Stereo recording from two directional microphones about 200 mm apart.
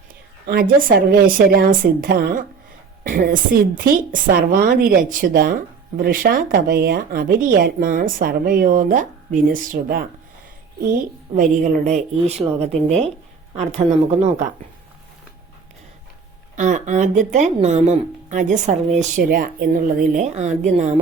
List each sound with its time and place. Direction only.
0.4 s a woman's voice: 50° right (ahead or behind)
11.3 s speech: 40° right (ahead or behind)
16.6 s speech: 40° right (ahead or behind)